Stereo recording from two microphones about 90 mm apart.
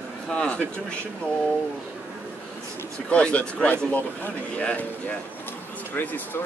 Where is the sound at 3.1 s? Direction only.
10° left (ahead or behind).